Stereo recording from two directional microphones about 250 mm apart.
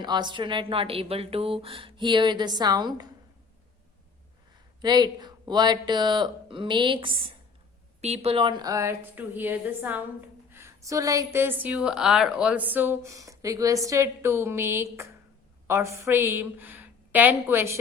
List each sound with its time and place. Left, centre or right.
0.0 s speech: centre
4.8 s a woman's voice: centre